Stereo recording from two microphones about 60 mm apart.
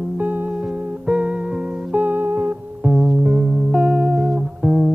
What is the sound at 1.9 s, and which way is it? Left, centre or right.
Music, right.